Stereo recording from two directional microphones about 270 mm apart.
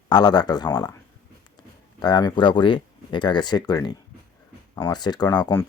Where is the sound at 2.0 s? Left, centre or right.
Centre.